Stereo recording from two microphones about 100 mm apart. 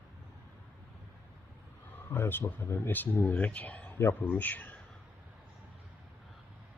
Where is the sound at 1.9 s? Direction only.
20° left (ahead or behind).